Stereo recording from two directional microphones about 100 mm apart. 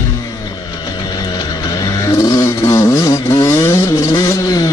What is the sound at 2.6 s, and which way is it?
Vehicle, 30° left (ahead or behind).